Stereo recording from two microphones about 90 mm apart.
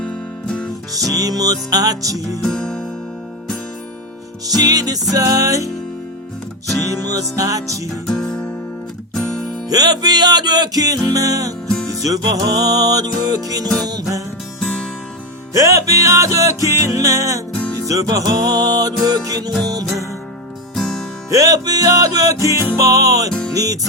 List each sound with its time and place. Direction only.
0.0 s music: 10° left (ahead or behind)
0.9 s music: 45° right (ahead or behind)
2.4 s music: 10° left (ahead or behind)
4.4 s music: 45° right (ahead or behind)
6.9 s music: 40° right (ahead or behind)
8.0 s music: 10° left (ahead or behind)
9.6 s music: 50° right (ahead or behind)
14.6 s music: 10° left (ahead or behind)
15.5 s music: 35° right (ahead or behind)
20.7 s music: centre (ahead or behind)
21.2 s music: 40° right (ahead or behind)